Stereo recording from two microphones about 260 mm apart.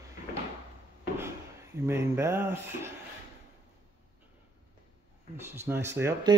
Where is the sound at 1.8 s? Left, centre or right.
Centre.